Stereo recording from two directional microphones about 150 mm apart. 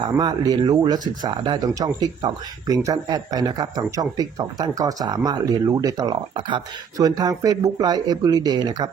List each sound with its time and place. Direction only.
0.0 s speech: 25° right (ahead or behind)